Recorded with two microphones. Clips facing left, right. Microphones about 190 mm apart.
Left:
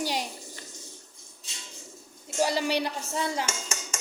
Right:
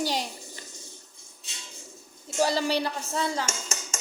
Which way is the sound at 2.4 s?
15° left (ahead or behind).